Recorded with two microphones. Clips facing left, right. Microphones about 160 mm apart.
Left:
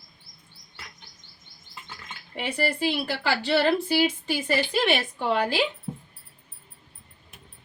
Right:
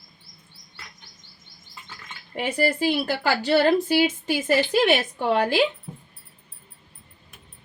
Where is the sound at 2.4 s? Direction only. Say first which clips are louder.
Right 4 dB; 45° right (ahead or behind).